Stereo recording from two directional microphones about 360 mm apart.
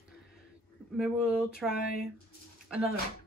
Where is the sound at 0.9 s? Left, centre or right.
Centre.